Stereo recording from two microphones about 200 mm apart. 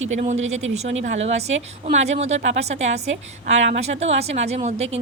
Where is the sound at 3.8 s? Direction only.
35° right (ahead or behind).